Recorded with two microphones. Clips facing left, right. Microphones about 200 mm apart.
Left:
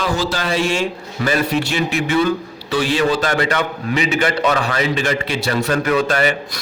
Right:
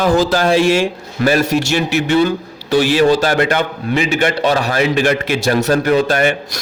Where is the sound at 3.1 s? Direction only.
35° right (ahead or behind).